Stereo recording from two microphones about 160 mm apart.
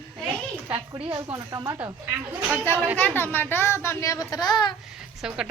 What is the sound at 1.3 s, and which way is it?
Speech, 20° right (ahead or behind).